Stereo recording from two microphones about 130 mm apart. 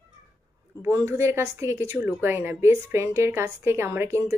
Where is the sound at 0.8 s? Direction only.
20° right (ahead or behind).